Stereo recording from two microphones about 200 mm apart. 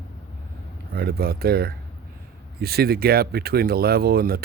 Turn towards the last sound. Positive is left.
turn(degrees=-50)  # may be behind; listen again after turning